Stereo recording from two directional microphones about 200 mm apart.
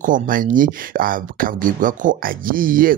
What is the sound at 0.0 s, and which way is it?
Speech, 40° right (ahead or behind).